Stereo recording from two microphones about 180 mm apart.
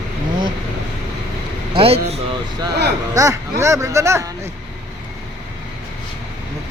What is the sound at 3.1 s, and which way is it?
Speech, 20° right (ahead or behind).